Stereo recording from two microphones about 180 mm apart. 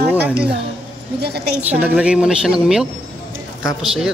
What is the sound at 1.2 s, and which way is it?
Speech, 65° right (ahead or behind).